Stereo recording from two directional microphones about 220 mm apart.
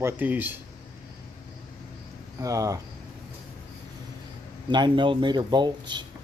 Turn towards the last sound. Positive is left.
turn(degrees=-20)  # may be behind; listen again after turning